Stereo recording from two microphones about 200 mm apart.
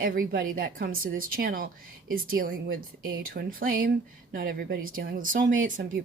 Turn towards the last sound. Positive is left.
turn(degrees=-40)  # may be behind; listen again after turning